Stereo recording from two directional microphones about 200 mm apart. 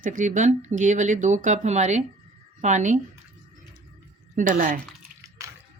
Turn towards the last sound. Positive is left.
turn(degrees=-15)  # may be behind; listen again after turning